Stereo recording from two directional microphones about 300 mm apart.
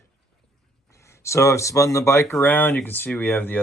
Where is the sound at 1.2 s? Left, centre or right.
Centre.